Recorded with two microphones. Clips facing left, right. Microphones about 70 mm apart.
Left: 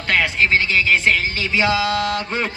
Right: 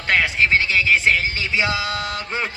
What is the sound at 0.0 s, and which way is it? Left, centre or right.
A man's voice, centre.